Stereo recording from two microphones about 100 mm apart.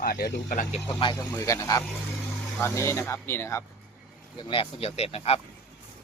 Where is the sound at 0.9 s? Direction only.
50° left (ahead or behind).